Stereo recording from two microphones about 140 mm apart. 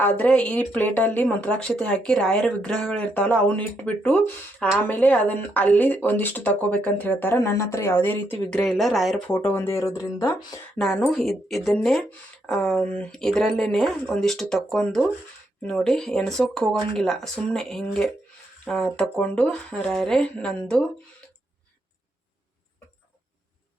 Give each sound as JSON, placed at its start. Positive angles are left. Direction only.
{"t": 0.0, "sound": "speech", "side_deg": 10}
{"t": 9.3, "sound": "speech", "side_deg": 15}
{"t": 10.8, "sound": "speech", "side_deg": 5}